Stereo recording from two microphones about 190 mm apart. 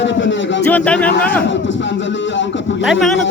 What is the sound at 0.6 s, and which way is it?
Speech, 10° left (ahead or behind).